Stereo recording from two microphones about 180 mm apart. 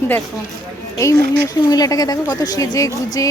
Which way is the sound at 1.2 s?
70° right (ahead or behind).